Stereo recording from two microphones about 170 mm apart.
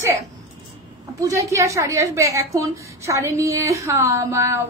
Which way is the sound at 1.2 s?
20° right (ahead or behind).